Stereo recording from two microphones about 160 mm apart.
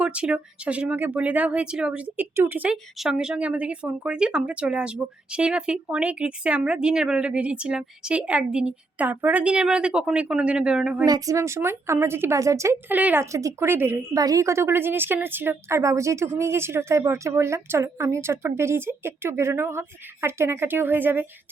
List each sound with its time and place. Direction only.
0.0 s speech: 5° right (ahead or behind)
11.0 s speech: 20° right (ahead or behind)